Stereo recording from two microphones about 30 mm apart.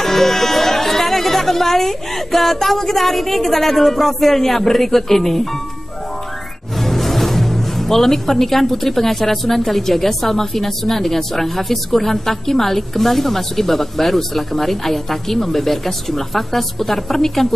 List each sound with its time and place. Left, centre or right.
0.0 s a woman's voice: centre
6.8 s music: centre
9.7 s a woman's voice: centre